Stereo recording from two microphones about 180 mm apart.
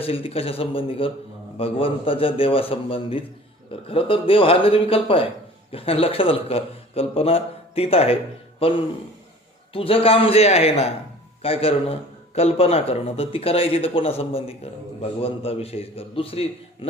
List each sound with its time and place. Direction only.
0.0 s a man's voice: 30° left (ahead or behind)
9.7 s a man's voice: 30° left (ahead or behind)